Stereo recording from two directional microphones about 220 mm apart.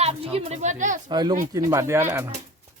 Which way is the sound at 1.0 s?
20° right (ahead or behind).